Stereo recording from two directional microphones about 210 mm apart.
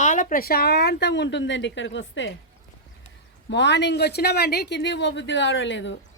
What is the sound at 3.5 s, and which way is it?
Speech, 55° left (ahead or behind).